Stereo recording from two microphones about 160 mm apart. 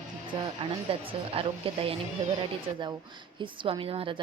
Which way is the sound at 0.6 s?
35° right (ahead or behind).